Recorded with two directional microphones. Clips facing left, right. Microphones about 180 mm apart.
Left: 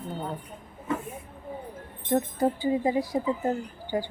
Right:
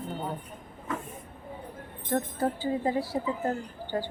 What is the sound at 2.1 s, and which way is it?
Speech, 15° left (ahead or behind).